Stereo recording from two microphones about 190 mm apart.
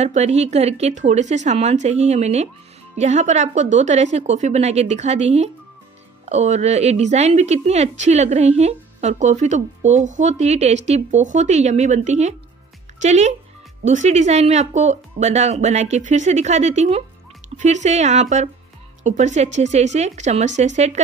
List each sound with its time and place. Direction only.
0.0 s a woman's voice: 35° right (ahead or behind)